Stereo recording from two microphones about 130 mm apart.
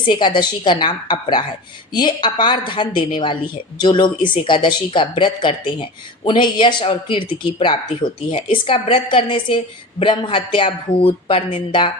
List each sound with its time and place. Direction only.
0.1 s a woman's voice: 35° left (ahead or behind)